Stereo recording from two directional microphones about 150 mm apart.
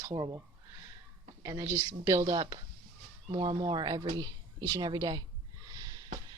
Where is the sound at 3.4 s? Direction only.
30° right (ahead or behind).